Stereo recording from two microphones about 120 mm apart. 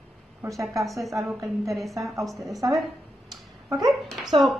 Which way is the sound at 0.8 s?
Centre (ahead or behind).